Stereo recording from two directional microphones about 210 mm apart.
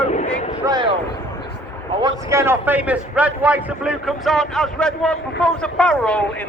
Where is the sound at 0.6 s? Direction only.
20° right (ahead or behind).